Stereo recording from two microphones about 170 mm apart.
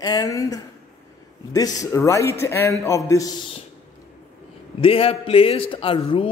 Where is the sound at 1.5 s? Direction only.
20° left (ahead or behind).